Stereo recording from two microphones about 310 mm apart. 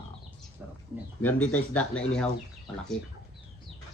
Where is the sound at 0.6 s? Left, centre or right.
Centre.